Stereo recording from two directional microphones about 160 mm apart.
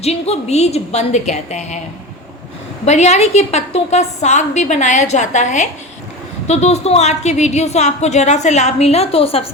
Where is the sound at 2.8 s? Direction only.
45° left (ahead or behind).